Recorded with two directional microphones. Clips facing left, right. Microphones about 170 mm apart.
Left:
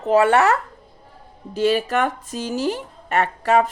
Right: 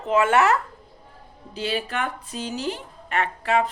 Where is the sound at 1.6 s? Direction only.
45° left (ahead or behind).